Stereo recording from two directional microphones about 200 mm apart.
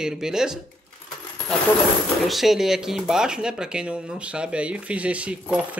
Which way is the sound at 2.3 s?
Centre (ahead or behind).